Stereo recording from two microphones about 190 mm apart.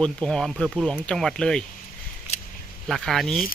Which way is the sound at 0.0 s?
5° left (ahead or behind).